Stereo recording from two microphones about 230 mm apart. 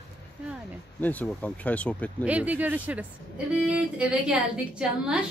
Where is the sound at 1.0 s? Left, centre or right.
Centre.